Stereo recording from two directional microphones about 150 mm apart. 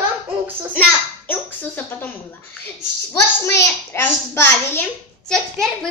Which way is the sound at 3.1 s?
15° left (ahead or behind).